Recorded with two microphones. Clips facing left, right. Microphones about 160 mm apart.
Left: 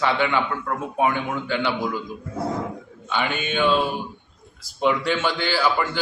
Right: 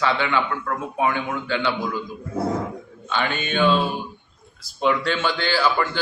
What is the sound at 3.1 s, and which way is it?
A man's voice, 10° left (ahead or behind).